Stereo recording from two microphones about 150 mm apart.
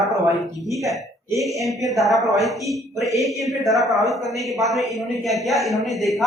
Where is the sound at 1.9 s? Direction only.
Centre (ahead or behind).